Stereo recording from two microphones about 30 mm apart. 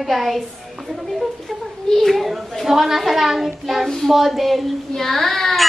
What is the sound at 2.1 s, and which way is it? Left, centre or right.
Music, centre.